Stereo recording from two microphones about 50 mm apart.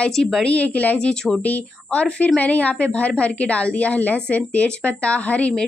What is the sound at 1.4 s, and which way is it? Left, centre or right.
Speech, left.